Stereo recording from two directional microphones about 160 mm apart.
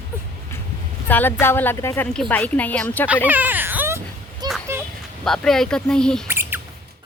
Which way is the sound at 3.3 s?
10° right (ahead or behind).